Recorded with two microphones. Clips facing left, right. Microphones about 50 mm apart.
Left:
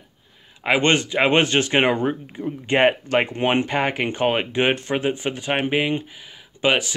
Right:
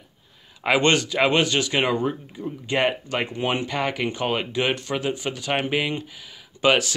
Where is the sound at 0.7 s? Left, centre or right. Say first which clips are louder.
Left 1 dB; left.